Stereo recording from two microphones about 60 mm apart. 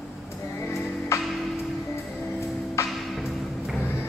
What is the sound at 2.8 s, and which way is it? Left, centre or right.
Music, left.